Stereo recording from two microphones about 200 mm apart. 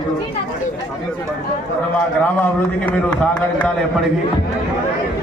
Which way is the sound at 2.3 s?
10° left (ahead or behind).